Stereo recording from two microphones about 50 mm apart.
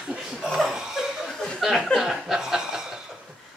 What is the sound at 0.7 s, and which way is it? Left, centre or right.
Chuckle, centre.